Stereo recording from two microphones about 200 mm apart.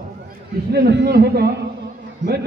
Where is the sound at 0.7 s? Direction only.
55° right (ahead or behind).